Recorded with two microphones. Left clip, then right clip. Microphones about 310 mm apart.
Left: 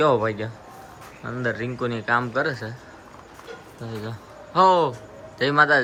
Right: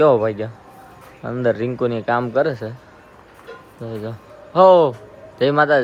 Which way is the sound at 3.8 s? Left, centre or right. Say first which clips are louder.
Right 6 dB; centre.